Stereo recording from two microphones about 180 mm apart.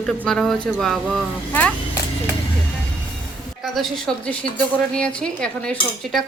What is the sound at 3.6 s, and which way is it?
A woman's voice, centre (ahead or behind).